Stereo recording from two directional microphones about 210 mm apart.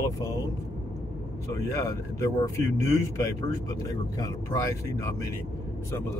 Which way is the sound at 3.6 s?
15° left (ahead or behind).